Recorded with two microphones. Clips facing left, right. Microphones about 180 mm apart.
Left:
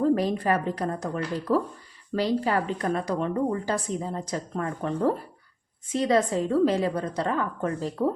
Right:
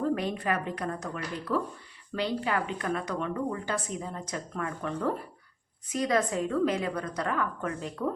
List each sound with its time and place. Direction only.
0.0 s speech: 35° left (ahead or behind)